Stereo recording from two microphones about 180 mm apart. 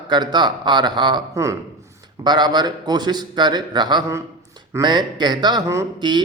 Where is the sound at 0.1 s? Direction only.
25° right (ahead or behind).